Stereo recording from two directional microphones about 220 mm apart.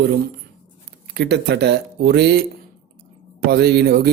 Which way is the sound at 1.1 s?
50° right (ahead or behind).